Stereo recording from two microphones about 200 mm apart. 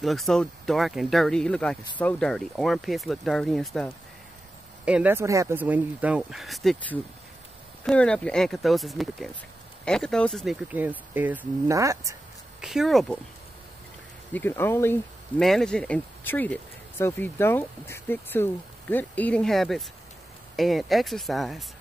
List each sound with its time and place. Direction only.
0.0 s speech: centre (ahead or behind); by 12.2 s 15° right (ahead or behind)
12.6 s speech: centre (ahead or behind)
14.3 s speech: 10° left (ahead or behind)